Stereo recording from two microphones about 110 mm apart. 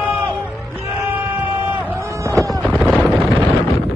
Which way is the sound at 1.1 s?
15° right (ahead or behind).